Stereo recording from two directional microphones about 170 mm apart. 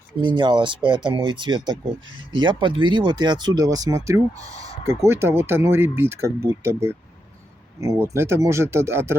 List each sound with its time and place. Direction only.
0.2 s speech: 25° right (ahead or behind)